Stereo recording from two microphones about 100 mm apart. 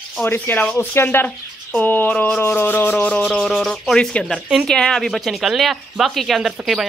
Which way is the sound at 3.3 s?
Centre (ahead or behind).